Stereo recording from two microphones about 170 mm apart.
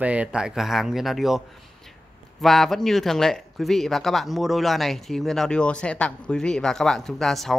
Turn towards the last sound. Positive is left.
turn(degrees=0)  # may be behind; listen again after turning